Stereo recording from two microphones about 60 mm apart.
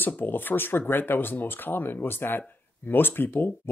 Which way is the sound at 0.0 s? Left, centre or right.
Left.